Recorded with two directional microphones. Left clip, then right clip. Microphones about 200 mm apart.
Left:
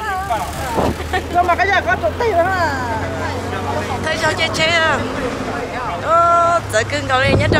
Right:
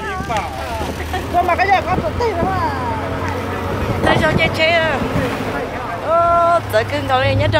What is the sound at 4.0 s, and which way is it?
Speech, 15° right (ahead or behind).